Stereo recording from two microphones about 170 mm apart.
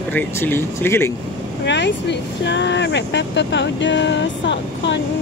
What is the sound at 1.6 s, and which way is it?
Speech, 90° left.